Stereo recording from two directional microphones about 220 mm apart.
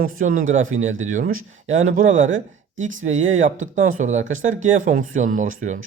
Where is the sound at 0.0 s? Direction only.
40° right (ahead or behind).